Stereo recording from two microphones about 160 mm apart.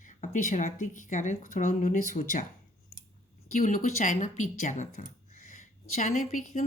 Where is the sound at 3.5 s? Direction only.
55° left (ahead or behind).